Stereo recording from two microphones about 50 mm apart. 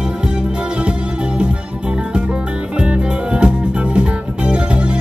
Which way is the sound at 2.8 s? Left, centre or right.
Centre.